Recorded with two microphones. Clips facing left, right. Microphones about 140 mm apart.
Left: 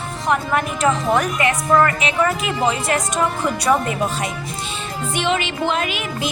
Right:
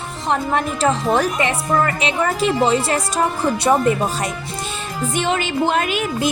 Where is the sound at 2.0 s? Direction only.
30° right (ahead or behind).